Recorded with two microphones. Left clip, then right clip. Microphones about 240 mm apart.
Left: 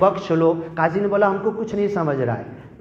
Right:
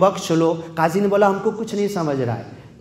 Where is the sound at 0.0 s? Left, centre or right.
Right.